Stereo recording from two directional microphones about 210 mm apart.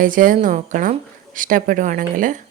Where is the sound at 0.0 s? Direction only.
40° right (ahead or behind).